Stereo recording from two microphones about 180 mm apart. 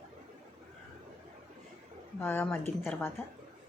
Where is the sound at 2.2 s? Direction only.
10° left (ahead or behind).